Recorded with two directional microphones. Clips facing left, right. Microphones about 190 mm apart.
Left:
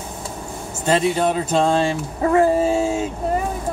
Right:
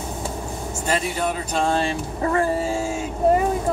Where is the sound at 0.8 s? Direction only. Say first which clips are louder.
Left 6 dB; 25° left (ahead or behind).